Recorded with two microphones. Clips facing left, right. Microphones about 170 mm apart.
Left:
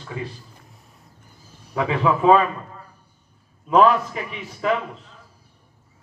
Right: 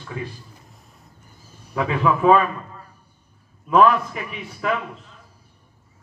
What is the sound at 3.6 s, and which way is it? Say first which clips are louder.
A man's voice: even; 30° left (ahead or behind).